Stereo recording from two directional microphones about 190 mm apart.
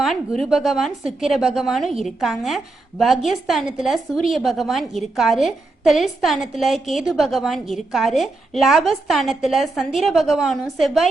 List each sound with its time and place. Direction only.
0.0 s a woman's voice: centre (ahead or behind)